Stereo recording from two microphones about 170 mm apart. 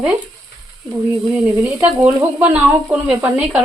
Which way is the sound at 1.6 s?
10° right (ahead or behind).